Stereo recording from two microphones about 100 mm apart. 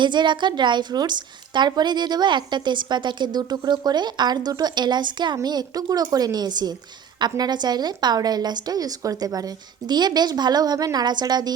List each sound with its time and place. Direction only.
0.0 s a woman's voice: 50° right (ahead or behind)